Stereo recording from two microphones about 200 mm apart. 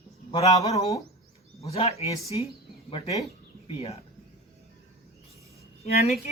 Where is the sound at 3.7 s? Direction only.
30° left (ahead or behind).